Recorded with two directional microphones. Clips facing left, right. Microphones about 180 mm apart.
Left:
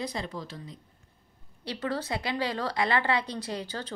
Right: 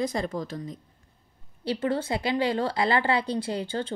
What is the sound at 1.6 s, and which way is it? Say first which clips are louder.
A woman's voice: right 5 dB; 25° right (ahead or behind).